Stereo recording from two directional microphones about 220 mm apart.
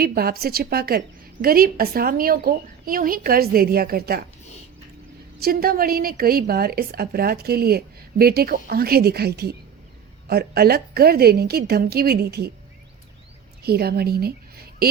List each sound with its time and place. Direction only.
0.0 s a woman's voice: 45° right (ahead or behind)
5.4 s a woman's voice: 45° right (ahead or behind)
13.6 s a woman's voice: 45° right (ahead or behind)